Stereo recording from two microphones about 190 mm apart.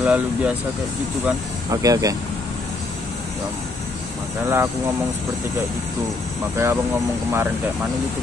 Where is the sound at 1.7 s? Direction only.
20° right (ahead or behind).